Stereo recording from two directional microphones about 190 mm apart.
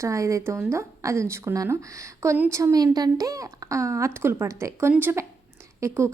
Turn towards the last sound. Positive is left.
turn(degrees=-15)  # may be behind; listen again after turning